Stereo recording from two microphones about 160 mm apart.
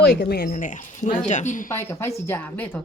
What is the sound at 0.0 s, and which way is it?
Speech, 90° left.